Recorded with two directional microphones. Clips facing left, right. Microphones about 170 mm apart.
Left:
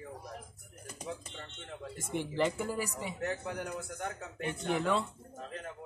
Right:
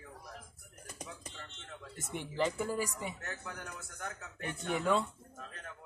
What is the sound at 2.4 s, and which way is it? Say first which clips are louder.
A man's voice: even; 10° left (ahead or behind).